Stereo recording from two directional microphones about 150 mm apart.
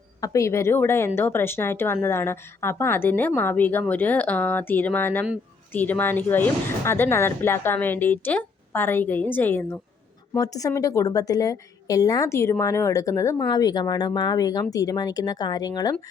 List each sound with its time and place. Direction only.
0.2 s a woman's voice: 20° left (ahead or behind)